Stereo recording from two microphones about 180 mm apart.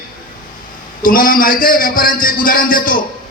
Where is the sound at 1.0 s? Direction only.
50° left (ahead or behind).